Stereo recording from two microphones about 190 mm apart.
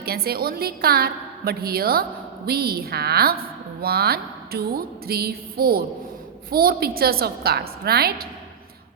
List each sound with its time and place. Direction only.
0.0 s a woman's voice: 55° right (ahead or behind)